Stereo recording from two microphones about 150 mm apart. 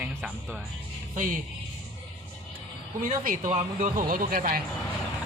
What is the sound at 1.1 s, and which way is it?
Speech, 60° right (ahead or behind).